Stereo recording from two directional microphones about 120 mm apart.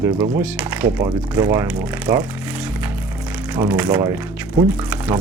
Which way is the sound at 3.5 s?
10° right (ahead or behind).